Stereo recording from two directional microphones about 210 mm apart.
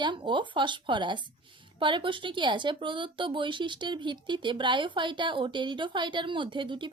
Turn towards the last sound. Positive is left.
turn(degrees=-20)  # may be behind; listen again after turning